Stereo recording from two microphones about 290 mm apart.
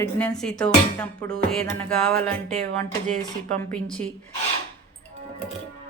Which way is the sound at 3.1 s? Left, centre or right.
Right.